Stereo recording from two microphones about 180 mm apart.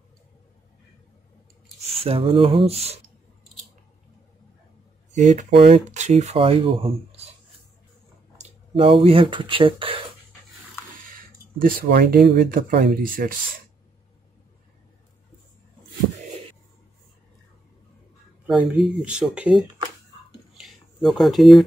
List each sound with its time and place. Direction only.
2.0 s speech: 30° right (ahead or behind)
5.1 s speech: 40° right (ahead or behind)
8.4 s speech: 30° right (ahead or behind)
11.1 s speech: 55° right (ahead or behind)
18.5 s speech: 5° right (ahead or behind)
20.5 s a sound: centre (ahead or behind)